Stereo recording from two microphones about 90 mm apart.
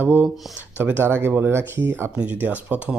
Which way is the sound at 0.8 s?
20° right (ahead or behind).